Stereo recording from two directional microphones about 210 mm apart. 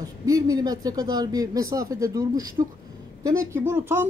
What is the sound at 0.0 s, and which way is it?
A woman's voice, 15° right (ahead or behind).